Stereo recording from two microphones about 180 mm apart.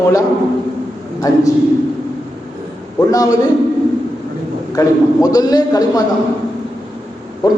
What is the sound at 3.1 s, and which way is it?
Speech, 20° left (ahead or behind).